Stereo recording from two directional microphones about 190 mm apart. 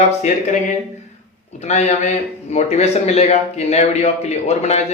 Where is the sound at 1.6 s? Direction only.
35° left (ahead or behind).